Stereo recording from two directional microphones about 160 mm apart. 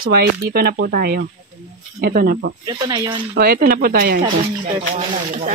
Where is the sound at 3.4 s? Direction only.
65° right (ahead or behind).